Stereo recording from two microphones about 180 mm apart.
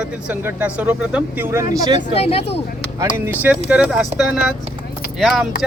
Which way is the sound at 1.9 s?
35° left (ahead or behind).